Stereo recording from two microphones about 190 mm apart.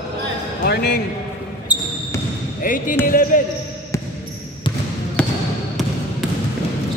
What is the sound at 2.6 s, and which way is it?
Basketball bounce, 45° left (ahead or behind).